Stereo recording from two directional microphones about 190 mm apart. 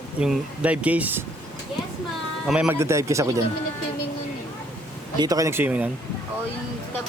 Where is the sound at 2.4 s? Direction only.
5° right (ahead or behind).